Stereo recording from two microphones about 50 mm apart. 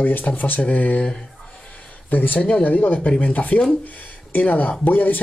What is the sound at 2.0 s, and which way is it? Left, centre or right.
Speech, left.